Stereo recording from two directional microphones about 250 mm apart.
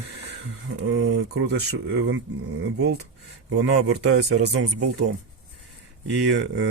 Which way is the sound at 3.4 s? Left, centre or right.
Right.